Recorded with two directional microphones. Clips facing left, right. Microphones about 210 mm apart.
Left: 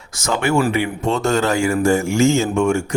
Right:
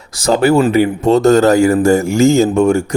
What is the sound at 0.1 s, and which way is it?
Speech, 35° right (ahead or behind).